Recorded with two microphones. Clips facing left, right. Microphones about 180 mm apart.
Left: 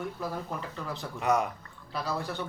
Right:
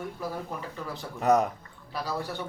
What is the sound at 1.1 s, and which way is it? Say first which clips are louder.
Speech: right 4 dB; 40° right (ahead or behind).